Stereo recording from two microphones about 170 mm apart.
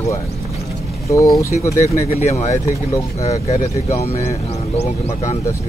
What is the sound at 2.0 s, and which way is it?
Speech, 40° left (ahead or behind).